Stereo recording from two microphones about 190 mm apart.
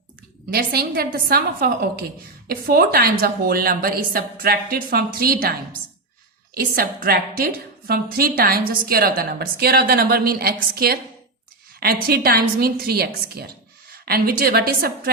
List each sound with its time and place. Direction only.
0.5 s a woman's voice: 55° right (ahead or behind)